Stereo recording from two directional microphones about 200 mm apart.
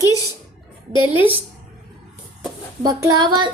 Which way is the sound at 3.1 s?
20° right (ahead or behind).